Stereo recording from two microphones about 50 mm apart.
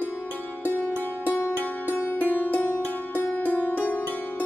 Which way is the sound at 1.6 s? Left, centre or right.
Left.